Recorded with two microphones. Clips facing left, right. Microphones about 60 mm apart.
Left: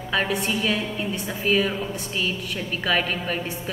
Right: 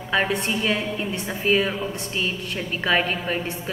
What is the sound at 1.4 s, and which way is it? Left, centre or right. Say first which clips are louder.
A woman's voice: right 1 dB; centre.